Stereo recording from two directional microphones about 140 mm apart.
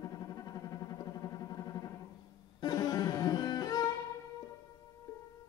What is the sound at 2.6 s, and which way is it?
Music, 30° left (ahead or behind).